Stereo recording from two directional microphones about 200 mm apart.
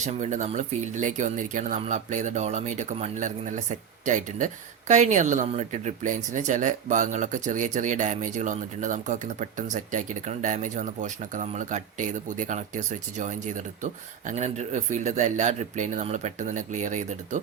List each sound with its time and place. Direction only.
0.0 s speech: 35° right (ahead or behind)